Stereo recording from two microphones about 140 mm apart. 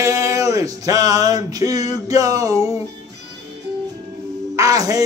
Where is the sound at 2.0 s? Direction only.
25° right (ahead or behind).